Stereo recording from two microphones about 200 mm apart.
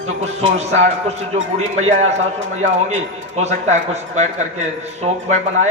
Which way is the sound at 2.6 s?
35° right (ahead or behind).